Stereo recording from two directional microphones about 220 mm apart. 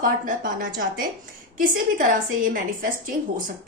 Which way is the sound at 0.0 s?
40° right (ahead or behind).